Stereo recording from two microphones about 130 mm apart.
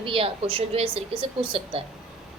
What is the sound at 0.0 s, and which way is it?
A woman's voice, 45° right (ahead or behind).